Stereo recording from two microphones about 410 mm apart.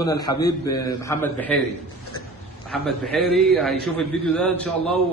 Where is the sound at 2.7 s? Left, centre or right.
Centre.